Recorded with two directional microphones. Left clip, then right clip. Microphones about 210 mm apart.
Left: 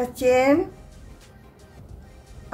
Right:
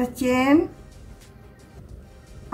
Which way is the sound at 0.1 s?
25° left (ahead or behind).